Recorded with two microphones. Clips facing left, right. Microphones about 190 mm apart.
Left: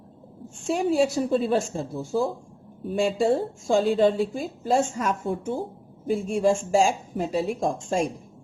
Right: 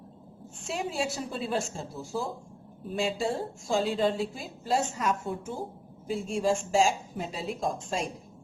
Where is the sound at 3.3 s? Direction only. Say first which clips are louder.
Left 7 dB; 50° left (ahead or behind).